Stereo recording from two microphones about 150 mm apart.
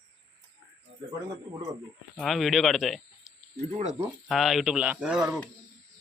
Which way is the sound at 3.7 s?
50° right (ahead or behind).